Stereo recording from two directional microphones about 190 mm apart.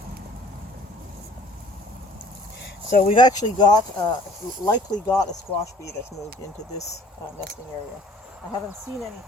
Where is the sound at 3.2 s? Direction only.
20° left (ahead or behind).